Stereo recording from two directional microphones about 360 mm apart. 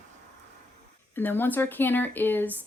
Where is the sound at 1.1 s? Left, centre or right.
Centre.